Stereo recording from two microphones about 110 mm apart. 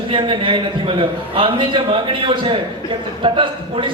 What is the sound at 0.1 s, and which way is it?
A man's voice, 50° right (ahead or behind).